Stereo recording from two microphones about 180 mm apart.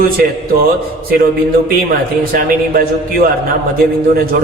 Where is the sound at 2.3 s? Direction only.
50° right (ahead or behind).